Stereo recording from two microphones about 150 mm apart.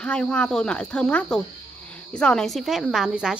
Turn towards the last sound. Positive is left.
turn(degrees=-5)  # may be behind; listen again after turning